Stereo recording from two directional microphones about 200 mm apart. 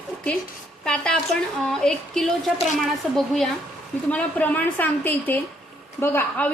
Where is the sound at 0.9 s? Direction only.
5° left (ahead or behind).